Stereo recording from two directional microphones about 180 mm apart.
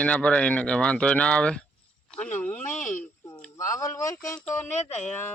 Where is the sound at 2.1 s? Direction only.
5° left (ahead or behind).